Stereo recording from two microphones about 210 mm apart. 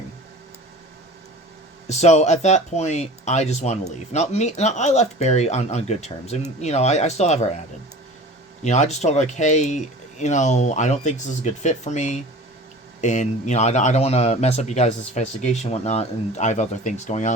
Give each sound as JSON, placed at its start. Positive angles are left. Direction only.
{"t": 1.9, "sound": "speech", "side_deg": 30}
{"t": 8.6, "sound": "speech", "side_deg": 35}